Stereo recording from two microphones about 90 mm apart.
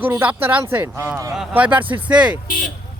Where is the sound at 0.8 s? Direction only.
35° right (ahead or behind).